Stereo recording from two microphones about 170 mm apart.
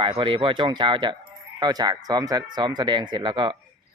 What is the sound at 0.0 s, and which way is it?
Speech, 30° right (ahead or behind).